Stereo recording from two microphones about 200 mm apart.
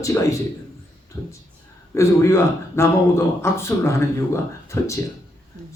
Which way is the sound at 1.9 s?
15° left (ahead or behind).